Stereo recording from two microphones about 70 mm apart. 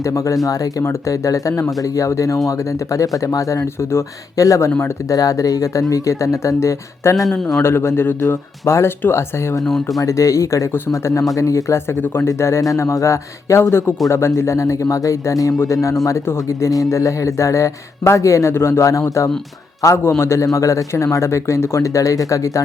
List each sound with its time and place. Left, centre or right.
0.0 s a man's voice: left
9.6 s speech: centre
10.0 s a man's voice: left
18.5 s a man's voice: left